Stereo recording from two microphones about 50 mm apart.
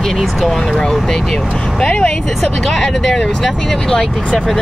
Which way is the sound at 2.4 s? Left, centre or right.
Centre.